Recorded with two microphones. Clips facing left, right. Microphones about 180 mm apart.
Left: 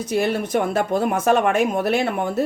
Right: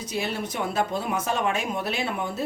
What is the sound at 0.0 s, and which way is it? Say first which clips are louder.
Speech: left 8 dB; 55° left (ahead or behind).